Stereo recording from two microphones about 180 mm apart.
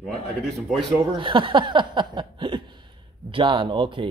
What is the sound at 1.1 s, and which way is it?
Speech, 25° right (ahead or behind).